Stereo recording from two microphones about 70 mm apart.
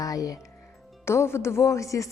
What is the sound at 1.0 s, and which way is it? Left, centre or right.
A woman's voice, left.